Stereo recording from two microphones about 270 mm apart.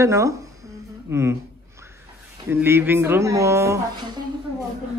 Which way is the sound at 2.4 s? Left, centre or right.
Centre.